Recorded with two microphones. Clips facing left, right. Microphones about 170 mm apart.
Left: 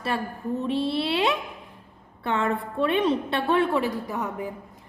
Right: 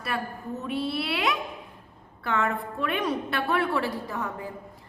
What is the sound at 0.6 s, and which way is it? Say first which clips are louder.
A woman's voice: left 4 dB; 25° left (ahead or behind).